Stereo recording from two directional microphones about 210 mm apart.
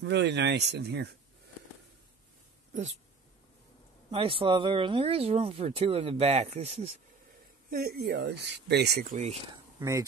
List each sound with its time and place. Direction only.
0.0 s speech: 55° right (ahead or behind)
2.7 s speech: 35° right (ahead or behind)
4.1 s speech: 25° right (ahead or behind)
7.7 s speech: 45° right (ahead or behind)
9.8 s speech: 15° right (ahead or behind)